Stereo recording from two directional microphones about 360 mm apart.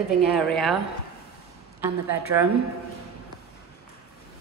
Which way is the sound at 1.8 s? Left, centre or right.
Centre.